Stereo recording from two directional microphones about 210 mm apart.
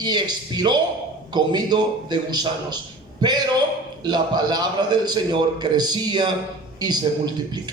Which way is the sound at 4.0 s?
20° right (ahead or behind).